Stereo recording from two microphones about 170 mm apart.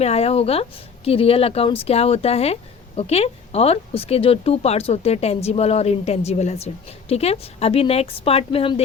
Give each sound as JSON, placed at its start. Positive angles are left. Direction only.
{"t": 0.0, "sound": "speech", "side_deg": 40}